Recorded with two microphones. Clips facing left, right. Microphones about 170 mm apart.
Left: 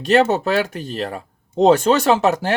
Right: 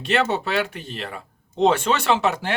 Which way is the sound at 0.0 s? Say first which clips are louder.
Left 6 dB; 40° left (ahead or behind).